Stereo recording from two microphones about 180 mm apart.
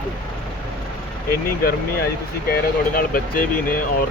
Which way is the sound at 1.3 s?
55° left (ahead or behind).